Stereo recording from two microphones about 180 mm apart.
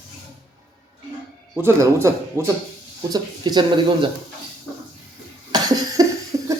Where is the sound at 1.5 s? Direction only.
15° right (ahead or behind).